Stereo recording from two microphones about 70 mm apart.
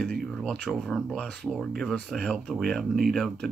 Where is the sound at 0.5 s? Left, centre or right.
Centre.